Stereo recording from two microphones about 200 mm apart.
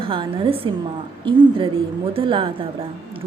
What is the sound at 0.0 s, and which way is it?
A woman's voice, 25° right (ahead or behind).